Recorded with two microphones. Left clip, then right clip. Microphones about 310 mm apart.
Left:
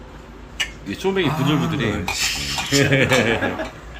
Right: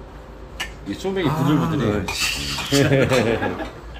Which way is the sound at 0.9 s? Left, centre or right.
Centre.